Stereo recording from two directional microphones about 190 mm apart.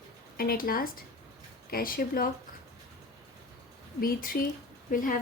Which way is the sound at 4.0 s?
50° left (ahead or behind).